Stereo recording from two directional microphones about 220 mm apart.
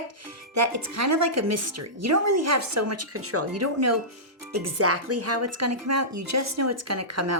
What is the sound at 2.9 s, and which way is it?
Speech, 90° right.